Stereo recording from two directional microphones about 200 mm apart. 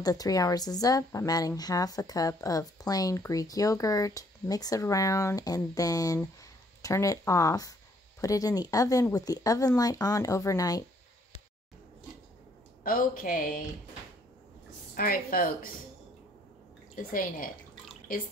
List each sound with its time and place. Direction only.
0.0 s a woman's voice: 20° left (ahead or behind)
12.8 s speech: 45° left (ahead or behind)
15.0 s speech: 45° left (ahead or behind)
16.9 s speech: 45° left (ahead or behind)